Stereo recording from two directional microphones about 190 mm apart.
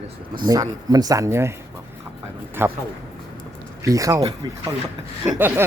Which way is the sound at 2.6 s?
10° right (ahead or behind).